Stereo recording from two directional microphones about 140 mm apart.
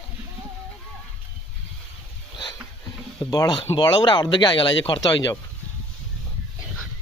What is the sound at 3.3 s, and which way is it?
Speech, 25° left (ahead or behind).